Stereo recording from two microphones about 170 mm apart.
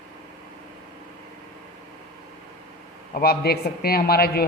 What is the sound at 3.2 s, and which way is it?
A man's voice, 65° left (ahead or behind).